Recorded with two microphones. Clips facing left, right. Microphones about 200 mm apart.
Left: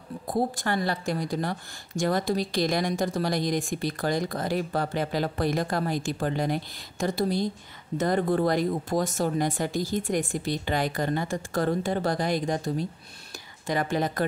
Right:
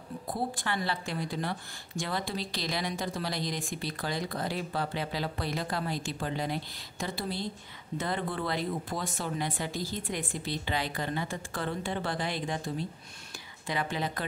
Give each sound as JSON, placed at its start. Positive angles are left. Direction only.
{"t": 0.3, "sound": "a woman's voice", "side_deg": 45}